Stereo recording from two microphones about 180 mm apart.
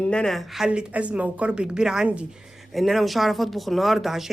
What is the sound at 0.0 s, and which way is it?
A woman's voice, 5° left (ahead or behind).